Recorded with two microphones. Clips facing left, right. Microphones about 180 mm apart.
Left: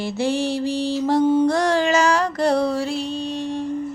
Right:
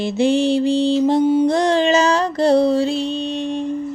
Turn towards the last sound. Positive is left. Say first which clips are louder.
# right 3 dB
turn(degrees=-20)  # may be behind; listen again after turning